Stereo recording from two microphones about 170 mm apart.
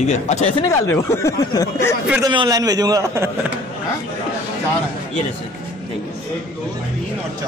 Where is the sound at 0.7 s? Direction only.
15° left (ahead or behind).